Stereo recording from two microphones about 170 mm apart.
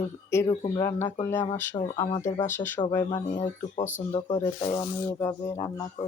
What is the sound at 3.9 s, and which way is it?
Speech, 50° left (ahead or behind).